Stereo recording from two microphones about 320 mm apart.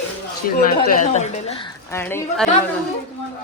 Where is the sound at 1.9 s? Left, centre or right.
Centre.